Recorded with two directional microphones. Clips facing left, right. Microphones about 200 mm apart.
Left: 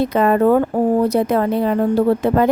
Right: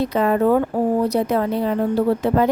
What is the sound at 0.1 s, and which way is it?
A woman's voice, 55° left (ahead or behind).